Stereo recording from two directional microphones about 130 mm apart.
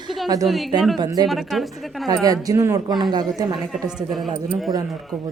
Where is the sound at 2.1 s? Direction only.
30° right (ahead or behind).